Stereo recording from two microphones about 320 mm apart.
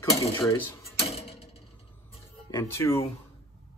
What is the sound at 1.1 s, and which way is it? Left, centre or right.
Tick-tock, centre.